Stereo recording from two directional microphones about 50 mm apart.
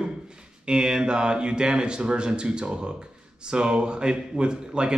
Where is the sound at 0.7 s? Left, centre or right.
Centre.